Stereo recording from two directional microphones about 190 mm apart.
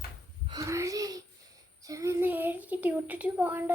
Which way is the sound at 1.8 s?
15° right (ahead or behind).